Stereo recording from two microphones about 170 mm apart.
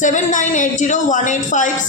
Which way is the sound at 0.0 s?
50° left (ahead or behind).